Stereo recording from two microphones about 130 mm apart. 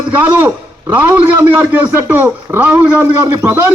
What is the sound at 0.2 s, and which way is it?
A man's voice, 15° right (ahead or behind).